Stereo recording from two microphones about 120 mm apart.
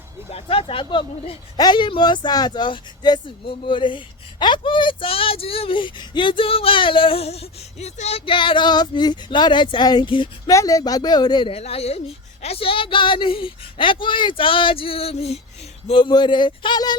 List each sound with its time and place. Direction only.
0.3 s speech: 55° left (ahead or behind)
8.2 s speech: 45° left (ahead or behind)
10.5 s speech: 30° left (ahead or behind)
11.5 s speech: 60° left (ahead or behind)
15.9 s speech: 40° left (ahead or behind)